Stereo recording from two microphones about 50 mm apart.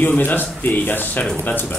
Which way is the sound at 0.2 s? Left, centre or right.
Left.